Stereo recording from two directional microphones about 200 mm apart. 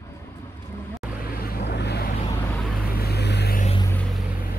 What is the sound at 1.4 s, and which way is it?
Vehicle, 55° left (ahead or behind).